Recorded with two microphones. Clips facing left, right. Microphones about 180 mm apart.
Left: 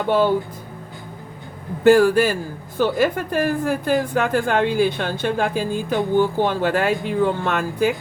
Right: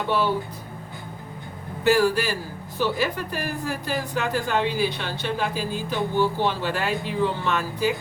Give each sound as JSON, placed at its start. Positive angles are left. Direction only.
{"t": 1.8, "sound": "a woman's voice", "side_deg": 50}